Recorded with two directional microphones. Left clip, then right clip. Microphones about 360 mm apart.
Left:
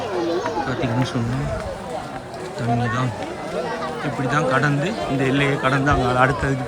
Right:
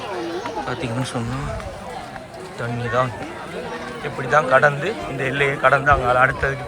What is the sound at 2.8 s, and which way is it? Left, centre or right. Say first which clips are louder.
Speech: right 3 dB; centre.